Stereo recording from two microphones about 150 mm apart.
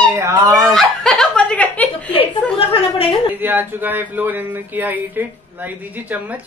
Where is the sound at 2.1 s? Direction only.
35° left (ahead or behind).